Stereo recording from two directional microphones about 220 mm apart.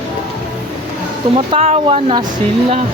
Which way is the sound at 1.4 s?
25° right (ahead or behind).